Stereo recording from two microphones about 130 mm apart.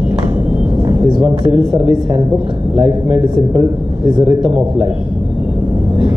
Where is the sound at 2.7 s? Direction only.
10° right (ahead or behind).